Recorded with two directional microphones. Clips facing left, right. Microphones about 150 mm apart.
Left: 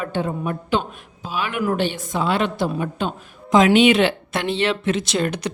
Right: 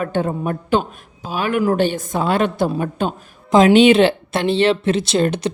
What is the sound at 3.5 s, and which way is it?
Speech, 30° right (ahead or behind).